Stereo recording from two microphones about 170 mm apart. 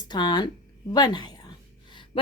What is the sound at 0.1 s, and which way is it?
A woman's voice, 25° left (ahead or behind).